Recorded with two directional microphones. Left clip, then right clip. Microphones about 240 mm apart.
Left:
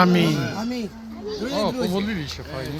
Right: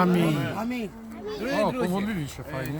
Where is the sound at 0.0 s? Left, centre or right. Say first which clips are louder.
Left 5 dB; centre.